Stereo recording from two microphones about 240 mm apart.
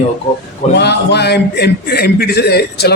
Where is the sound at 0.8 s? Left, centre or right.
Left.